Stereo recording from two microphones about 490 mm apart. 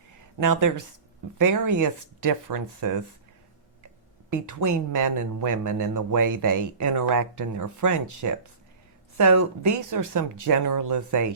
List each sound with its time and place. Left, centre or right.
0.3 s a man's voice: right
4.3 s a man's voice: right